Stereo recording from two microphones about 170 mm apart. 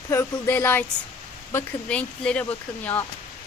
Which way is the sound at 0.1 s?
15° left (ahead or behind).